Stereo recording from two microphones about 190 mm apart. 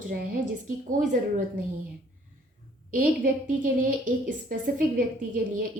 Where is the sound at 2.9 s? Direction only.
45° right (ahead or behind).